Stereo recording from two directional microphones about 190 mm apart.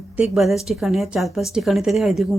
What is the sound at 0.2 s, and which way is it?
A woman's voice, centre (ahead or behind).